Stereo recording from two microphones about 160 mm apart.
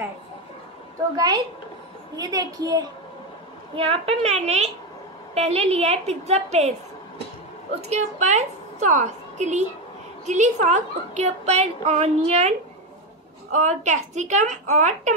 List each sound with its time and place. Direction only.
1.1 s a woman's voice: 25° right (ahead or behind)
3.7 s a woman's voice: 35° right (ahead or behind)
7.8 s a woman's voice: 45° right (ahead or behind)